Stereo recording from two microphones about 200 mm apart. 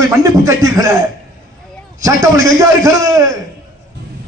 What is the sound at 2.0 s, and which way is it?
A man's voice, 15° right (ahead or behind).